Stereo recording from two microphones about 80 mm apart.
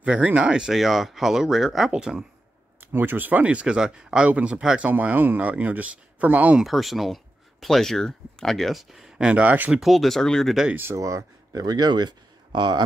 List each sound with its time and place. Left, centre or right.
0.0 s speech: centre
2.8 s speech: right
6.6 s speech: centre
9.7 s speech: centre
10.8 s speech: right